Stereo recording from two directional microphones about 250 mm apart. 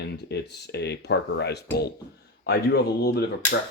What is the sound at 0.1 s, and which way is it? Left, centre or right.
Speech, left.